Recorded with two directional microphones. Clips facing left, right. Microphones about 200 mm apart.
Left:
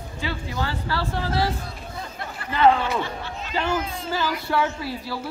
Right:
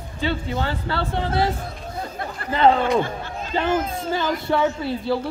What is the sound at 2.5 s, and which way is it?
Speech, 30° right (ahead or behind).